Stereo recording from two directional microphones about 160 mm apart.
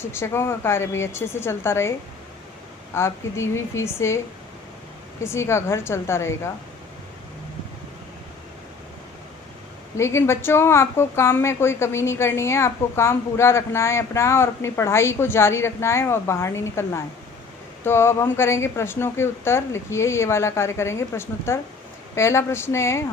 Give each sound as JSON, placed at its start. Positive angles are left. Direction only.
{"t": 0.1, "sound": "a woman's voice", "side_deg": 15}
{"t": 2.9, "sound": "a woman's voice", "side_deg": 15}
{"t": 5.2, "sound": "a woman's voice", "side_deg": 15}
{"t": 10.0, "sound": "a woman's voice", "side_deg": 15}